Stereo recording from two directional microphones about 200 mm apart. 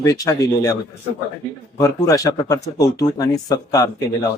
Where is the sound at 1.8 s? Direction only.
15° left (ahead or behind).